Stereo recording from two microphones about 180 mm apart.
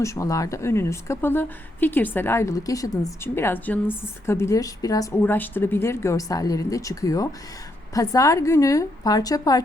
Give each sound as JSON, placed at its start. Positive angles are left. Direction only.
{"t": 0.0, "sound": "a woman's voice", "side_deg": 15}